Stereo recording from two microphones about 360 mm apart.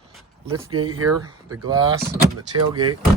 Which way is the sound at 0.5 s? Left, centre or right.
Right.